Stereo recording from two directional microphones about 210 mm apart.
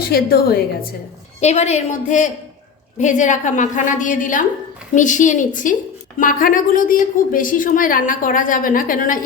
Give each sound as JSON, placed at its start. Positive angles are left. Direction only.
{"t": 0.1, "sound": "a woman's voice", "side_deg": 45}
{"t": 1.4, "sound": "speech", "side_deg": 30}